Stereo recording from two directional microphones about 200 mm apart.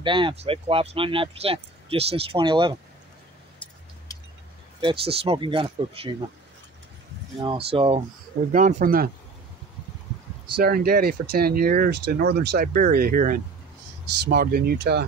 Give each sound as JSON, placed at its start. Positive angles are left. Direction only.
{"t": 0.0, "sound": "speech", "side_deg": -25}
{"t": 4.8, "sound": "speech", "side_deg": -30}
{"t": 7.4, "sound": "speech", "side_deg": -25}
{"t": 10.6, "sound": "speech", "side_deg": -50}